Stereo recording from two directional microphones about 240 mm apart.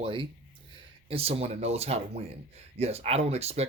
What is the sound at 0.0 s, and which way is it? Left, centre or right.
Speech, right.